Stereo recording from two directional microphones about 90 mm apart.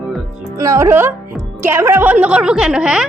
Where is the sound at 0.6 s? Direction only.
35° right (ahead or behind).